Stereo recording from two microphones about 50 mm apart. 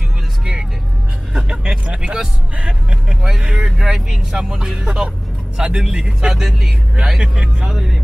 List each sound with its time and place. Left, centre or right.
1.9 s speech: centre